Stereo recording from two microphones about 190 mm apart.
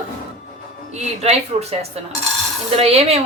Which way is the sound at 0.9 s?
35° right (ahead or behind).